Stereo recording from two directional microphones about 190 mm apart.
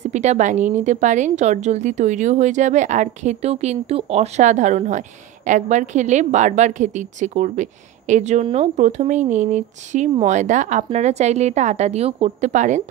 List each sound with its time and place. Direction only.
0.0 s a woman's voice: 35° right (ahead or behind)